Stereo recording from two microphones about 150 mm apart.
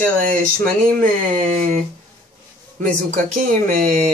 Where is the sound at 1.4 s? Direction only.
50° right (ahead or behind).